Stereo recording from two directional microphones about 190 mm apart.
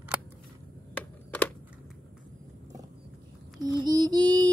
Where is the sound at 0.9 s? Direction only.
5° left (ahead or behind).